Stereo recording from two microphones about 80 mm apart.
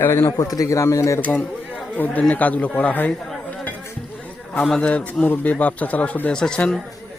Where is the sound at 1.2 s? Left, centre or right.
Centre.